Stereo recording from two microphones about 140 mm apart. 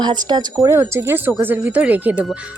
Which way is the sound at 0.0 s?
30° right (ahead or behind).